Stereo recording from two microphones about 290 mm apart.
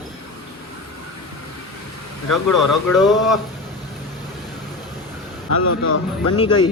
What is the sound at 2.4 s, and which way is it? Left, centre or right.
Speech, left.